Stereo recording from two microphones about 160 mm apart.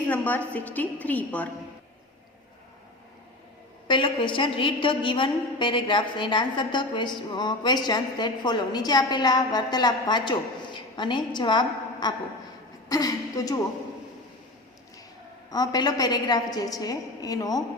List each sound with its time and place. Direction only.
0.1 s a woman's voice: 10° left (ahead or behind)
3.8 s a woman's voice: 30° left (ahead or behind)
15.4 s a woman's voice: 25° left (ahead or behind)